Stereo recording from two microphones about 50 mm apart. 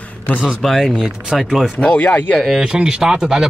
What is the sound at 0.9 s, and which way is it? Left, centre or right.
Speech, centre.